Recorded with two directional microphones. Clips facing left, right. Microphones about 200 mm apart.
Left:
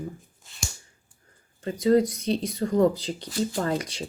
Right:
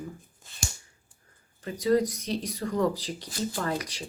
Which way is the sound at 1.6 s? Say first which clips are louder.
Left 4 dB; 25° left (ahead or behind).